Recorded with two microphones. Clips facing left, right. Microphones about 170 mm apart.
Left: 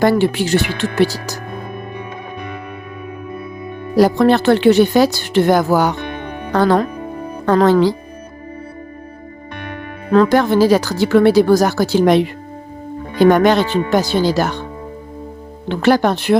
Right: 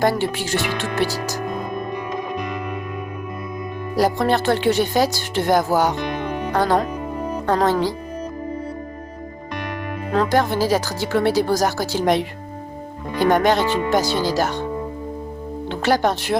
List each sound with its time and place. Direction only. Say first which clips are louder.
0.0 s speech: left 6 dB; 65° left (ahead or behind)
3.9 s speech: left 7 dB; 65° left (ahead or behind)
10.1 s speech: left 7 dB; 65° left (ahead or behind)
15.7 s speech: left 5 dB; 60° left (ahead or behind)